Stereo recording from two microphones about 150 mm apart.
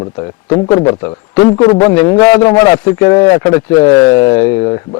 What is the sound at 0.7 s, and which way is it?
A man's voice, 30° left (ahead or behind).